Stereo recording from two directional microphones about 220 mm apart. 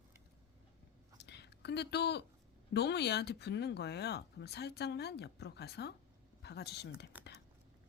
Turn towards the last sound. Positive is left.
turn(degrees=-5)  # may be behind; listen again after turning